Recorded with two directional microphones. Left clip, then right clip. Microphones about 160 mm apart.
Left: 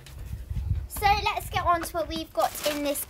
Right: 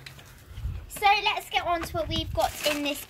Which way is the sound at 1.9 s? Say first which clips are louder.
Even; 30° left (ahead or behind).